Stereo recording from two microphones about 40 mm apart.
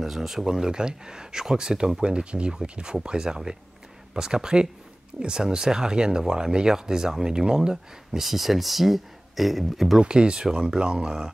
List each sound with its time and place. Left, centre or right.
0.0 s speech: centre
0.5 s speech: centre
7.7 s speech: centre
9.9 s speech: right